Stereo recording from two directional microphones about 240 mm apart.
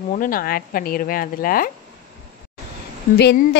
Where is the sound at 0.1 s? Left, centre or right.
Left.